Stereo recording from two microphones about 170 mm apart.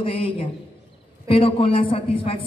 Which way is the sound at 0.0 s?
30° left (ahead or behind).